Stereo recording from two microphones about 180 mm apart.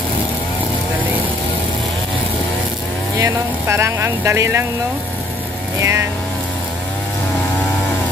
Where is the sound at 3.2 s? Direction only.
15° right (ahead or behind).